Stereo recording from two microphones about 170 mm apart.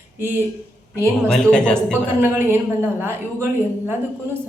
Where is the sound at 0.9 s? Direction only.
15° right (ahead or behind).